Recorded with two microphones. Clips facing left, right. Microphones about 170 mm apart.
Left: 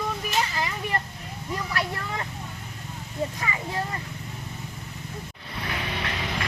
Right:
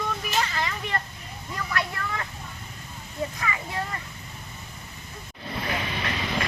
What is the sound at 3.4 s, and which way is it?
Speech, 25° left (ahead or behind).